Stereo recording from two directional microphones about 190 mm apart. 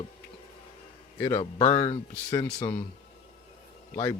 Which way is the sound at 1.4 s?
35° left (ahead or behind).